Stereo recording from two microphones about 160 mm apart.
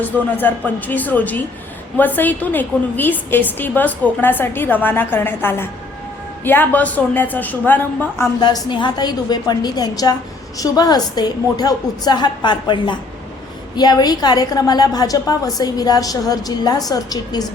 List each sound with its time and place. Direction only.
0.3 s a woman's voice: 10° left (ahead or behind)
8.2 s a woman's voice: 25° left (ahead or behind)